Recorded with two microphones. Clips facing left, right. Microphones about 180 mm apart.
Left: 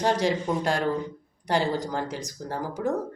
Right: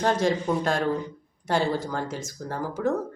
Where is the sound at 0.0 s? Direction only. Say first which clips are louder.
Right 1 dB; 15° left (ahead or behind).